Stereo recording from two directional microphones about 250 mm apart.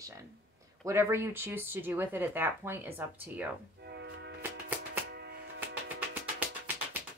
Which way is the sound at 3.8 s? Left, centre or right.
Right.